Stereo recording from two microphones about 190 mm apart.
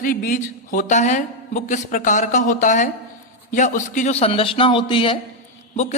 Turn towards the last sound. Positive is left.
turn(degrees=40)  # may be behind; listen again after turning